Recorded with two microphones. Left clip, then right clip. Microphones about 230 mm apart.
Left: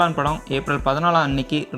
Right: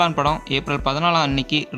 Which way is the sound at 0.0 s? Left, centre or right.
Centre.